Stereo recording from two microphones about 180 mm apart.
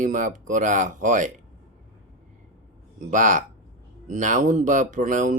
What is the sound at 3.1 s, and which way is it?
Speech, 45° right (ahead or behind).